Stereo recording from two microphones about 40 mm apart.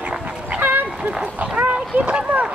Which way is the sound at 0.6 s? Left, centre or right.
Right.